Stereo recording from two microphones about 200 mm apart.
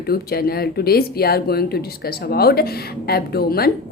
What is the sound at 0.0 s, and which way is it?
Speech, 50° left (ahead or behind).